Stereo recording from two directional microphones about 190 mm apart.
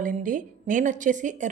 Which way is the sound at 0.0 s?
45° right (ahead or behind).